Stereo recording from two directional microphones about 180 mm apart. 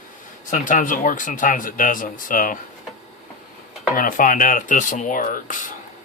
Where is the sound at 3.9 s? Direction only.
50° left (ahead or behind).